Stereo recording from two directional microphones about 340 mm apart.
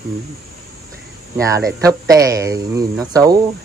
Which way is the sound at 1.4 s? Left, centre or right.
Centre.